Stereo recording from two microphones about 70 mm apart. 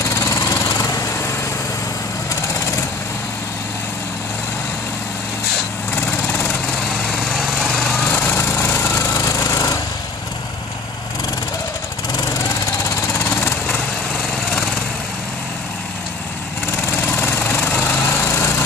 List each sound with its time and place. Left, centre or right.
0.1 s lawn mower: left
5.9 s vehicle: left
7.1 s lawn mower: centre
7.8 s lawn mower: left
8.3 s a sound: left
13.3 s lawn mower: left
17.1 s lawn mower: left